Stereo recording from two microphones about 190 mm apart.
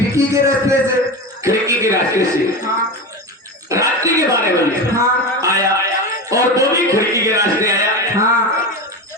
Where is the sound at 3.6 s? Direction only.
15° right (ahead or behind).